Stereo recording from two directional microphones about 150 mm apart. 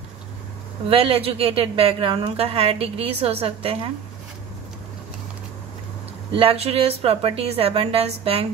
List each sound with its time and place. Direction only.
0.8 s a woman's voice: 40° right (ahead or behind)
6.3 s a woman's voice: 40° right (ahead or behind)